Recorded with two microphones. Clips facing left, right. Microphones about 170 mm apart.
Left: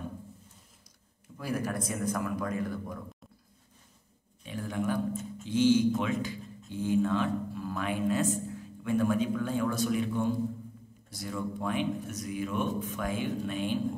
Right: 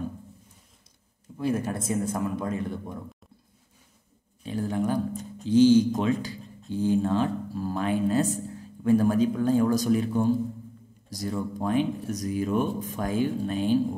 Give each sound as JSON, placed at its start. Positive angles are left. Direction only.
{"t": 1.4, "sound": "a man's voice", "side_deg": -25}
{"t": 4.5, "sound": "speech", "side_deg": -35}